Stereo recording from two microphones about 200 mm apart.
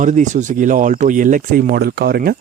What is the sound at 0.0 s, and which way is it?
Speech, 40° right (ahead or behind).